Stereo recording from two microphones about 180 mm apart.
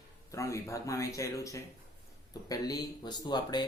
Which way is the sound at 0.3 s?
15° left (ahead or behind).